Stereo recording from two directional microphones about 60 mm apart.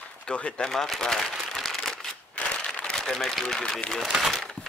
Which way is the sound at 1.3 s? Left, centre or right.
Centre.